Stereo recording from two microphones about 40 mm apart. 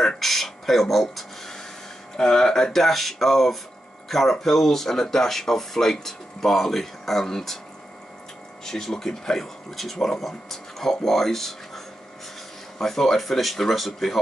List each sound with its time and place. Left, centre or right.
0.2 s a sound: centre
2.1 s speech: centre
8.6 s speech: centre